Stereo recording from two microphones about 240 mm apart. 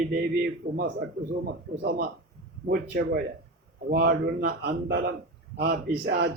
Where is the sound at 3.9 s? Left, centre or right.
Right.